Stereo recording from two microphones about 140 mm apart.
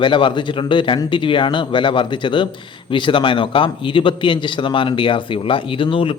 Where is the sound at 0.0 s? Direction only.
35° left (ahead or behind).